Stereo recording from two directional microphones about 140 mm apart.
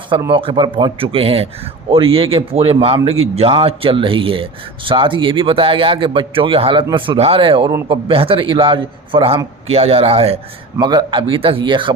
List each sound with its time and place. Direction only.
0.3 s a man's voice: 35° right (ahead or behind)
10.8 s speech: 30° right (ahead or behind)